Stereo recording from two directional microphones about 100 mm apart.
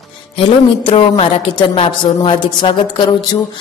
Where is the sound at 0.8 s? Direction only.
60° left (ahead or behind).